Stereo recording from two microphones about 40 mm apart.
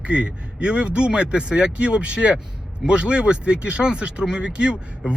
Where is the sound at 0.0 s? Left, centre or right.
Right.